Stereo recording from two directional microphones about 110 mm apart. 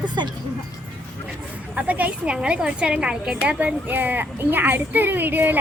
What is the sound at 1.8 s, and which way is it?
A woman's voice, 15° right (ahead or behind).